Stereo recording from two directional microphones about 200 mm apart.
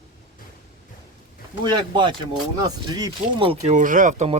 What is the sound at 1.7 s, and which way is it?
Speech, 25° right (ahead or behind).